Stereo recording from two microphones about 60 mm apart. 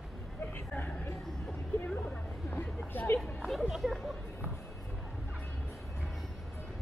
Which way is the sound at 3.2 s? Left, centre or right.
Centre.